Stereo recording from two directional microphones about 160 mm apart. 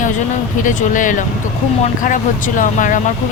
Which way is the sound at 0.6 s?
55° left (ahead or behind).